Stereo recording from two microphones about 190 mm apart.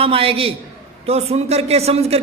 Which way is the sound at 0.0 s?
30° right (ahead or behind).